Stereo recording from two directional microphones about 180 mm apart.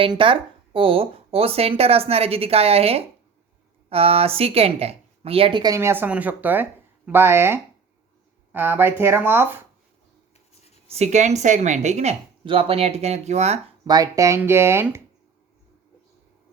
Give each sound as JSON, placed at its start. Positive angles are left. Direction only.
{"t": 0.0, "sound": "speech", "side_deg": -30}
{"t": 10.8, "sound": "speech", "side_deg": -35}
{"t": 13.8, "sound": "speech", "side_deg": -20}